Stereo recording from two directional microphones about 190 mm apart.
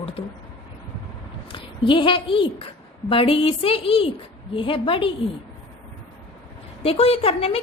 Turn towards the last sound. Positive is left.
turn(degrees=30)  # may be behind; listen again after turning